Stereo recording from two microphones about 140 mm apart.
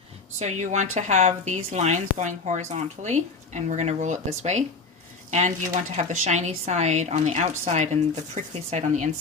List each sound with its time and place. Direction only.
0.3 s speech: 55° right (ahead or behind)